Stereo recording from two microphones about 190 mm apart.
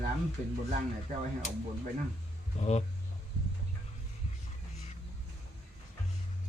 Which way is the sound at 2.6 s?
35° left (ahead or behind).